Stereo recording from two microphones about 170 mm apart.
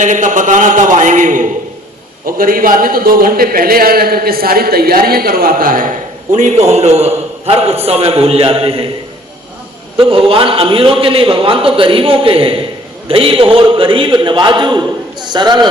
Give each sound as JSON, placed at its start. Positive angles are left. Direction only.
{"t": 0.0, "sound": "a man's voice", "side_deg": -45}
{"t": 10.0, "sound": "a man's voice", "side_deg": -30}